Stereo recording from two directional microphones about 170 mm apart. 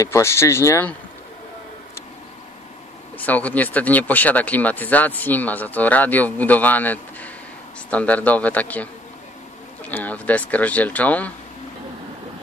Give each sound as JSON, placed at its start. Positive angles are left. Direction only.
{"t": 0.0, "sound": "speech", "side_deg": 15}
{"t": 3.2, "sound": "speech", "side_deg": 10}
{"t": 9.8, "sound": "speech", "side_deg": 10}